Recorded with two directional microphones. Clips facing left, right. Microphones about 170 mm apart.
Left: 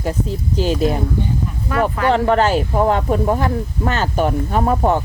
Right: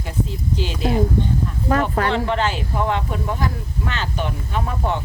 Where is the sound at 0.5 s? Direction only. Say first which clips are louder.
Left 8 dB; 45° left (ahead or behind).